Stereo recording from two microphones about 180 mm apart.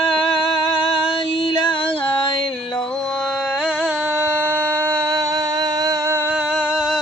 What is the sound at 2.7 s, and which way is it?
Carnatic music, 5° left (ahead or behind).